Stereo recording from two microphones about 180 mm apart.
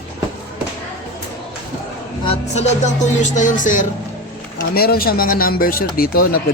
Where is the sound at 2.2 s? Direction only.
35° left (ahead or behind).